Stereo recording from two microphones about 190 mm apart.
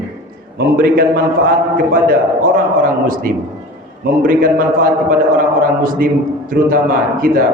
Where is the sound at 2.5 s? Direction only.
45° right (ahead or behind).